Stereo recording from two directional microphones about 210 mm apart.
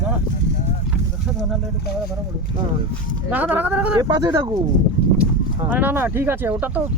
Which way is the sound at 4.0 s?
20° right (ahead or behind).